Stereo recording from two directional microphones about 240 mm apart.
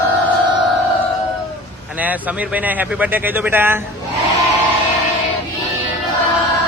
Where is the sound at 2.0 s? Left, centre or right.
Centre.